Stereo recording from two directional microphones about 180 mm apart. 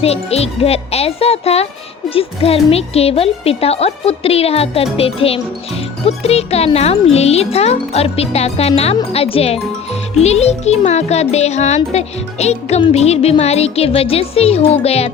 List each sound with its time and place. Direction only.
0.0 s speech: 35° left (ahead or behind)